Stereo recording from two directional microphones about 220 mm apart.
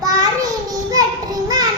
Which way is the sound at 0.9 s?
15° right (ahead or behind).